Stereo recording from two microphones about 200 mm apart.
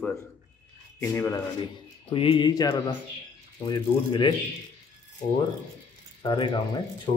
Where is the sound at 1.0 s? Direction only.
15° left (ahead or behind).